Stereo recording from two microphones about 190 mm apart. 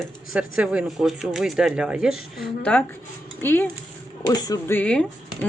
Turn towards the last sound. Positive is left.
turn(degrees=5)  # may be behind; listen again after turning